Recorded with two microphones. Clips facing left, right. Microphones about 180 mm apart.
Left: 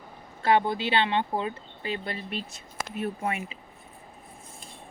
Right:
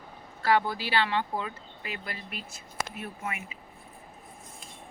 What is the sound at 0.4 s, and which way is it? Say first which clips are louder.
Speech: left 3 dB; 20° left (ahead or behind).